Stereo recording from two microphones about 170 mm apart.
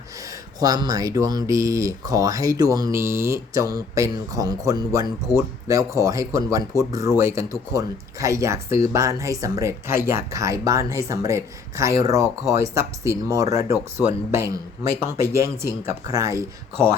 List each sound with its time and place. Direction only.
0.2 s speech: 20° right (ahead or behind)